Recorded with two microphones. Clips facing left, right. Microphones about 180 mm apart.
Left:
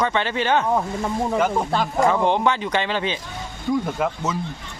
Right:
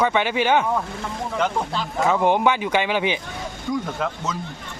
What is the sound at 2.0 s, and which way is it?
Speech, 10° right (ahead or behind).